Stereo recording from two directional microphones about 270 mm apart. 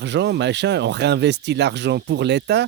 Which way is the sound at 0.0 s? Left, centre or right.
Right.